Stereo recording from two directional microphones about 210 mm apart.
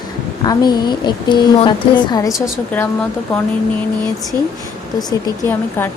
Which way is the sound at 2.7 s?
5° left (ahead or behind).